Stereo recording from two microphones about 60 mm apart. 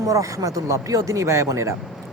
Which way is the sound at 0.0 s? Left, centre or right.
Right.